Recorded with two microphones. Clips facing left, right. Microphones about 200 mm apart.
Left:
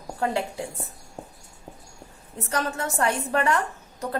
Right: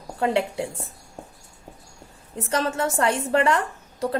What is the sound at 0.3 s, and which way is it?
Speech, 25° right (ahead or behind).